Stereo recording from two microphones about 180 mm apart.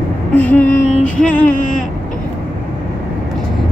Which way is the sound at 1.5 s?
45° left (ahead or behind).